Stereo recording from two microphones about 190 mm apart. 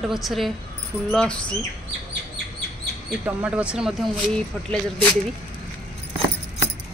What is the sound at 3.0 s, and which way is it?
Speech, 5° right (ahead or behind).